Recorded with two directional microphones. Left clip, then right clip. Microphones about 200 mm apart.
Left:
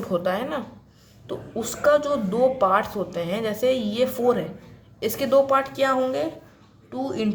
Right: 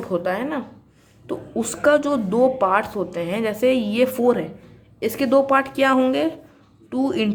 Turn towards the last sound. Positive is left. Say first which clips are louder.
# right 5 dB
turn(degrees=-40)  # may be behind; listen again after turning